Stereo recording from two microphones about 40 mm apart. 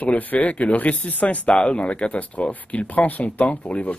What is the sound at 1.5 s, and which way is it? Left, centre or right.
Speech, left.